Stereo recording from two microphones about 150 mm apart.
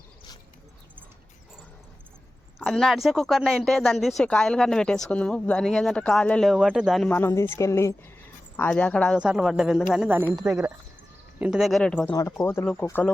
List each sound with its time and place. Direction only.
2.6 s speech: centre (ahead or behind)
7.1 s a woman's voice: 15° left (ahead or behind)
9.1 s speech: 5° right (ahead or behind)
11.3 s speech: 5° right (ahead or behind); by 13.1 s 10° left (ahead or behind)